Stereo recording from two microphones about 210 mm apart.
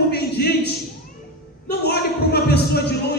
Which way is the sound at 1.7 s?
50° left (ahead or behind).